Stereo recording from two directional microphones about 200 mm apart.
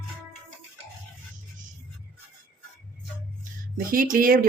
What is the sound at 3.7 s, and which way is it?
Speech, 45° right (ahead or behind).